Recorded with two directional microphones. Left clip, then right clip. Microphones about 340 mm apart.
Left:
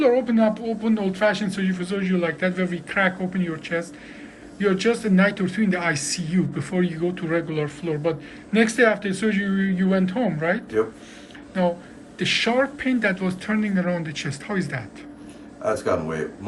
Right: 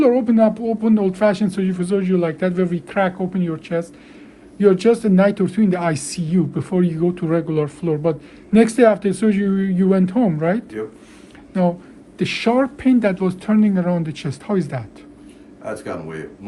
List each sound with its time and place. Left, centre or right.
0.0 s speech: centre